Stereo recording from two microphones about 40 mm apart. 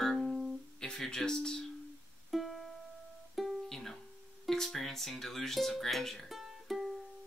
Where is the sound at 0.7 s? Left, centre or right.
Centre.